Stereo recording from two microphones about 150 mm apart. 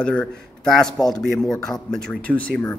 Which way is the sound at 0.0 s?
5° left (ahead or behind).